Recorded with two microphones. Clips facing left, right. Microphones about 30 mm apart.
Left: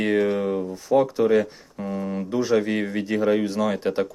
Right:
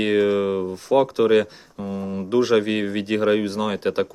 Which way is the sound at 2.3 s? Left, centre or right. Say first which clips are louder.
Right 4 dB; right.